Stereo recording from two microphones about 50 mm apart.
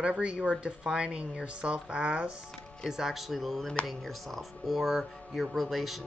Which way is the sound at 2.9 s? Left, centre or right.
Centre.